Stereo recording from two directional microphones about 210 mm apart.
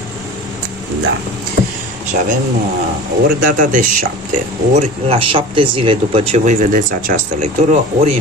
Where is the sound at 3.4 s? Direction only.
40° right (ahead or behind).